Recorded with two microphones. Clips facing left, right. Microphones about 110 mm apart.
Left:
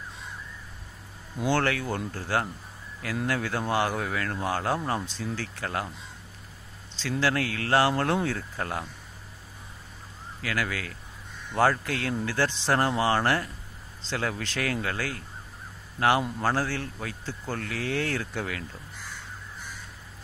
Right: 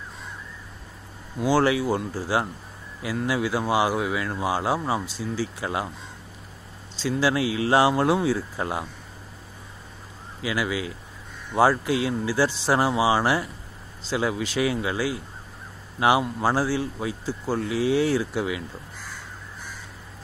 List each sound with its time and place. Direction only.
1.4 s speech: 10° right (ahead or behind)
7.0 s speech: 10° right (ahead or behind)
10.4 s speech: 15° right (ahead or behind)